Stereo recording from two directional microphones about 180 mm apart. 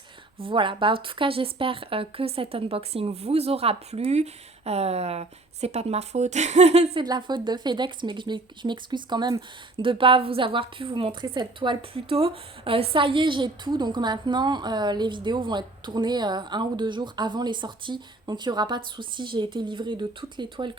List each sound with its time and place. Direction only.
0.3 s speech: 30° right (ahead or behind)
7.0 s speech: 25° right (ahead or behind)